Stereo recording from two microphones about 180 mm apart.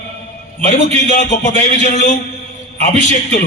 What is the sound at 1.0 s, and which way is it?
A man's voice, 45° left (ahead or behind).